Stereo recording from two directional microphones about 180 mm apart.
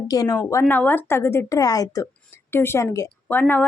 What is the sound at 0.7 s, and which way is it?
A woman's voice, 10° left (ahead or behind).